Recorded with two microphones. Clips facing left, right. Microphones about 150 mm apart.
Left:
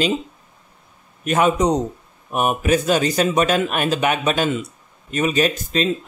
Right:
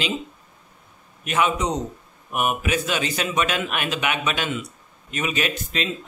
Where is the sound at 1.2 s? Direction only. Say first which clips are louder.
Left 5 dB; 40° left (ahead or behind).